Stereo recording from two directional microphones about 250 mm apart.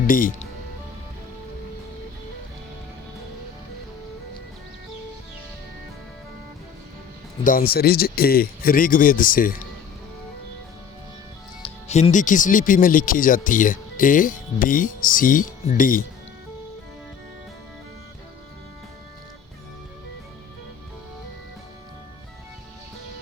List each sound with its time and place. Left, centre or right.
0.1 s speech: left
7.4 s speech: left
11.9 s speech: left